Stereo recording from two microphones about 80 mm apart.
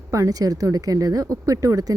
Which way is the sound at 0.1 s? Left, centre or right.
Right.